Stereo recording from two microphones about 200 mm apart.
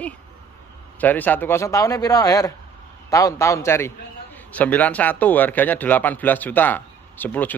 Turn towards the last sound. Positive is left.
turn(degrees=10)  # may be behind; listen again after turning